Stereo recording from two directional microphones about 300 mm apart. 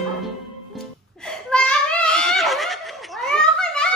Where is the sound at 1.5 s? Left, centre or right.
Centre.